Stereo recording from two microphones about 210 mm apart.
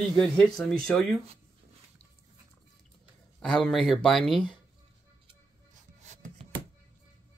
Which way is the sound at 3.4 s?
Centre (ahead or behind).